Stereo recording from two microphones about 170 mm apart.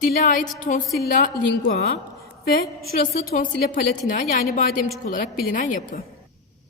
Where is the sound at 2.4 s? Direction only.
60° left (ahead or behind).